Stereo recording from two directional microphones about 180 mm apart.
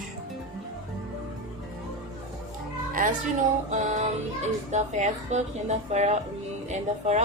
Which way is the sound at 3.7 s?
40° right (ahead or behind).